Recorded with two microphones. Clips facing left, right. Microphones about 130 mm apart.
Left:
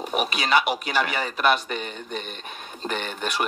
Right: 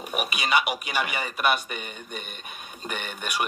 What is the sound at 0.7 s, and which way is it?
Speech, 10° right (ahead or behind).